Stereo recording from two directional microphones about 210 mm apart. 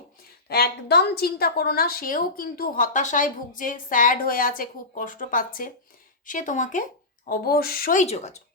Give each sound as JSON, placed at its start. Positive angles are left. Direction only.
{"t": 0.4, "sound": "a woman's voice", "side_deg": 50}